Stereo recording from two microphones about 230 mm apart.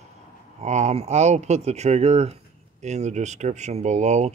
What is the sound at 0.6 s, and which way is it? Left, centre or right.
Speech, right.